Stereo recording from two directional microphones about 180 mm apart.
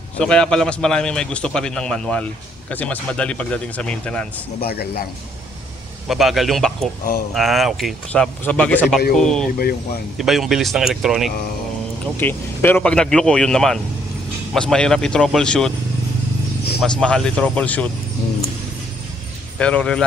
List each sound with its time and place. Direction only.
0.2 s a man's voice: 5° left (ahead or behind)
4.6 s a man's voice: 60° left (ahead or behind)
6.0 s a man's voice: centre (ahead or behind)
12.2 s a man's voice: 10° left (ahead or behind)
16.8 s a man's voice: 5° left (ahead or behind)
19.6 s speech: 5° left (ahead or behind)